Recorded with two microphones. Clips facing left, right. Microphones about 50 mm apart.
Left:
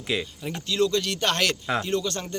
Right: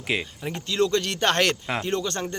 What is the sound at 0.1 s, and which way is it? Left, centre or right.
Speech, right.